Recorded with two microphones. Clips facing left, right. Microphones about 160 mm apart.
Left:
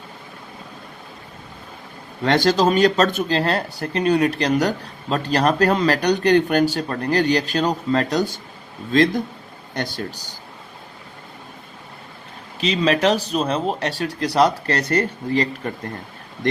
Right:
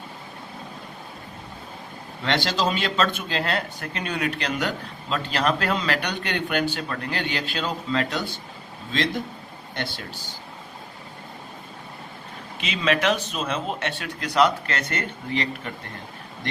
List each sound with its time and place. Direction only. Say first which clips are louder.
2.2 s a man's voice: left 7 dB; 45° left (ahead or behind)
12.5 s speech: left 5 dB; 35° left (ahead or behind)